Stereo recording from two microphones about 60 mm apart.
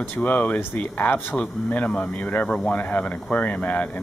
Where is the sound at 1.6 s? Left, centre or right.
Centre.